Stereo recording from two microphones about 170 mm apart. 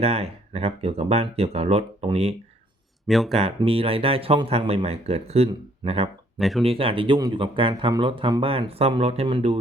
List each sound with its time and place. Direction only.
0.0 s speech: 35° right (ahead or behind)
3.1 s speech: centre (ahead or behind)
3.3 s speech: 35° right (ahead or behind)
6.4 s speech: centre (ahead or behind)
6.7 s speech: 30° right (ahead or behind)